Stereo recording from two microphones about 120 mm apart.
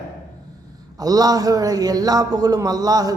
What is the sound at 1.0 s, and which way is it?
A woman's voice, 30° right (ahead or behind).